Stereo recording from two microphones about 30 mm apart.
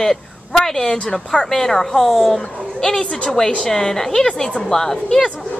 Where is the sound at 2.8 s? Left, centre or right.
Left.